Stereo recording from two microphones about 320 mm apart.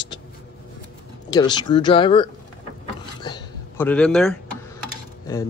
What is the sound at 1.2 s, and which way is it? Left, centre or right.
Speech, centre.